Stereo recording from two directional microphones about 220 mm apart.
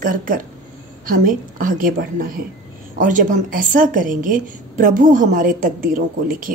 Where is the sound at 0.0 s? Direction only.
40° right (ahead or behind).